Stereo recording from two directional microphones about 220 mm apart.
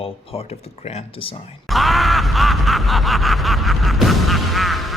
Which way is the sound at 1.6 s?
Centre (ahead or behind).